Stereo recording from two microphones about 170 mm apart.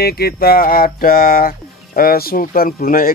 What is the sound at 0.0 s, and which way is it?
Speech, 65° left (ahead or behind).